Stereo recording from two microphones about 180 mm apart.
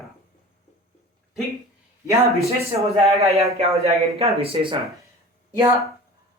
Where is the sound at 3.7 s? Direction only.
35° right (ahead or behind).